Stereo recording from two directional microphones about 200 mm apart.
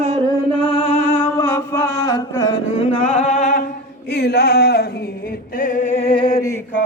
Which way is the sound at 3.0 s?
35° left (ahead or behind).